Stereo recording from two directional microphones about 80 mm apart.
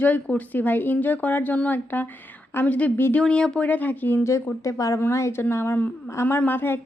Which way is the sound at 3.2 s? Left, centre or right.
Centre.